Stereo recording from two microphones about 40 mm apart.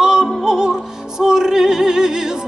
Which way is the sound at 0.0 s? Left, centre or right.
Centre.